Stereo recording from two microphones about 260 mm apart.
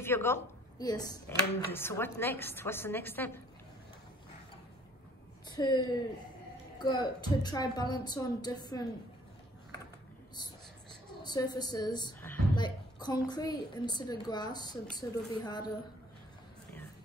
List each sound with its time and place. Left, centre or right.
0.0 s a woman's voice: centre
5.5 s a woman's voice: centre
11.2 s a woman's voice: centre